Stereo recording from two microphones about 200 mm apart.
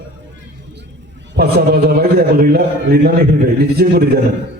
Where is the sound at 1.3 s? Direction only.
50° right (ahead or behind).